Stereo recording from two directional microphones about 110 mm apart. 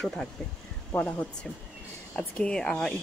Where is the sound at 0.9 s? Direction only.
10° left (ahead or behind).